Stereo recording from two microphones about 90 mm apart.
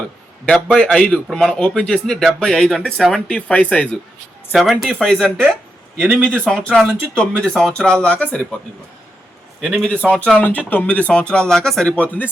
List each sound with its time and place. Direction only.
0.4 s a man's voice: 5° left (ahead or behind)
3.2 s a man's voice: 15° left (ahead or behind)
4.5 s a man's voice: centre (ahead or behind)
9.7 s a man's voice: 10° left (ahead or behind)